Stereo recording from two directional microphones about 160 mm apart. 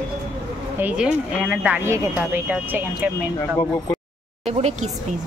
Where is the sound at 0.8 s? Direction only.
10° right (ahead or behind).